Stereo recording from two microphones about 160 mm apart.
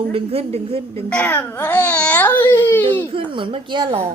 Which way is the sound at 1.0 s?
10° left (ahead or behind).